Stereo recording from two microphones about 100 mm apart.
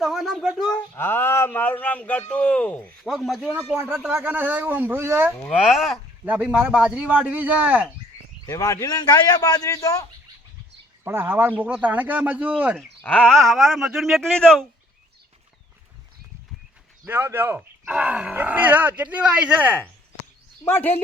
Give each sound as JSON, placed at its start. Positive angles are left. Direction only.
{"t": 0.0, "sound": "speech", "side_deg": 0}
{"t": 0.9, "sound": "speech", "side_deg": 25}
{"t": 3.0, "sound": "speech", "side_deg": 0}
{"t": 3.5, "sound": "a man's voice", "side_deg": -20}
{"t": 5.5, "sound": "speech", "side_deg": 0}
{"t": 6.2, "sound": "speech", "side_deg": -15}
{"t": 8.4, "sound": "speech", "side_deg": 35}
{"t": 11.0, "sound": "speech", "side_deg": -25}
{"t": 13.0, "sound": "speech", "side_deg": 15}
{"t": 13.3, "sound": "speech", "side_deg": 0}
{"t": 17.1, "sound": "speech", "side_deg": -20}
{"t": 20.7, "sound": "speech", "side_deg": 20}